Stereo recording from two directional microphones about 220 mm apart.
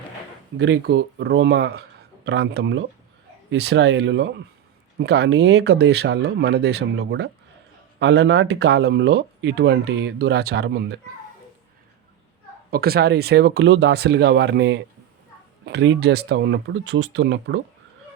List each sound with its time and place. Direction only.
0.5 s speech: 55° right (ahead or behind)
12.7 s speech: 45° right (ahead or behind)